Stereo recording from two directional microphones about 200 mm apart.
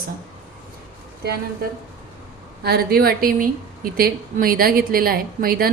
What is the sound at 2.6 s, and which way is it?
A woman's voice, 50° right (ahead or behind).